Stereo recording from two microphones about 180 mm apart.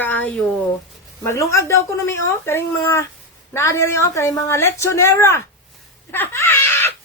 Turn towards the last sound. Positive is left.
turn(degrees=15)  # may be behind; listen again after turning